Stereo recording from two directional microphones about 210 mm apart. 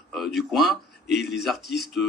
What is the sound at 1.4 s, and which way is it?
Speech, centre (ahead or behind).